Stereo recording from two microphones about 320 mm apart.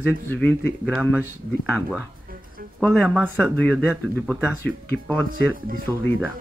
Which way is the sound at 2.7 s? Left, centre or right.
Centre.